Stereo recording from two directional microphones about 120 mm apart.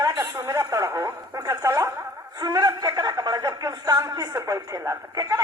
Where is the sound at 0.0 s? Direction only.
30° right (ahead or behind).